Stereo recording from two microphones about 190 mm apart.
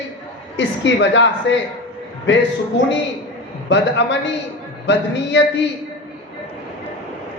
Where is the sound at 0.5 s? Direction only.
75° left (ahead or behind).